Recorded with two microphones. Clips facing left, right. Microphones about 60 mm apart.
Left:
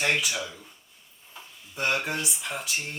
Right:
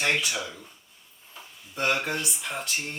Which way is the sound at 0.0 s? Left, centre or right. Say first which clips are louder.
Even; centre.